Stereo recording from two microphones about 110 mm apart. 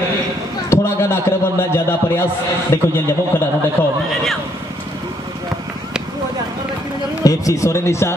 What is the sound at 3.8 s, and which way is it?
Speech, 15° left (ahead or behind).